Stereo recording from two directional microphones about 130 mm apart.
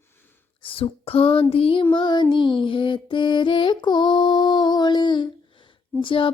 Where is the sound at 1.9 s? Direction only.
35° left (ahead or behind).